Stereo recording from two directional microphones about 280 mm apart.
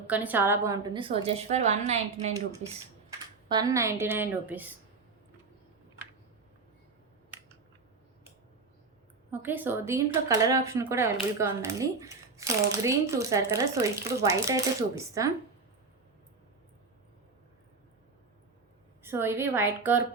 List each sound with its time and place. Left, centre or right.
0.1 s a woman's voice: centre; by 2.3 s right
3.5 s speech: centre
9.3 s speech: centre
19.0 s speech: centre